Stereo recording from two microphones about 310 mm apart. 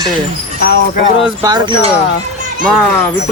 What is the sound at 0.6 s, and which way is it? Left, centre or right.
Speech, left.